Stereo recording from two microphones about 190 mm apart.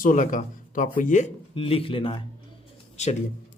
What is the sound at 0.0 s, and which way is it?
Speech, 45° left (ahead or behind).